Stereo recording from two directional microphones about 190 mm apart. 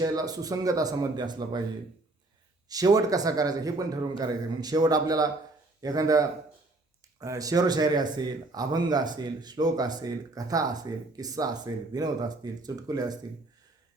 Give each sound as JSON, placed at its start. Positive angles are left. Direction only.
{"t": 0.0, "sound": "speech", "side_deg": -20}
{"t": 2.6, "sound": "speech", "side_deg": -20}